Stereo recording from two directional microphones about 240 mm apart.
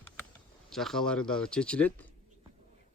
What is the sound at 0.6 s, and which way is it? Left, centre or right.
Speech, centre.